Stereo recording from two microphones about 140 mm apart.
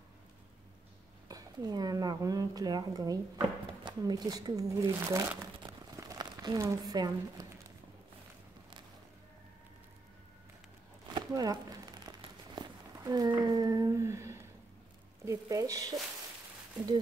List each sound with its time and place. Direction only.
1.3 s speech: 25° right (ahead or behind)
5.6 s crumpling: 25° right (ahead or behind)
11.1 s a sound: 25° right (ahead or behind)
15.2 s speech: 25° right (ahead or behind)